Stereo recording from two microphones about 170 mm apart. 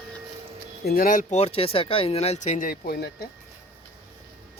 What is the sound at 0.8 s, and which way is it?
Speech, 60° left (ahead or behind).